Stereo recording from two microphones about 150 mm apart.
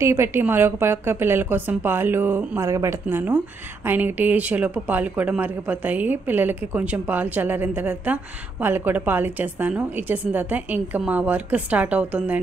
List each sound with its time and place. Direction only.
0.0 s speech: 20° right (ahead or behind)